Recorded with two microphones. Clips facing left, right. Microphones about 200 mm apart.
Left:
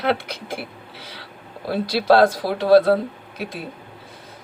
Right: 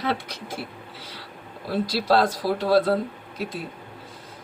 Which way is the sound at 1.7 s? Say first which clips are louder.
Left 4 dB; 60° left (ahead or behind).